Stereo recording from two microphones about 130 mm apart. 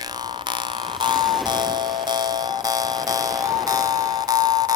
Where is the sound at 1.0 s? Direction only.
35° right (ahead or behind).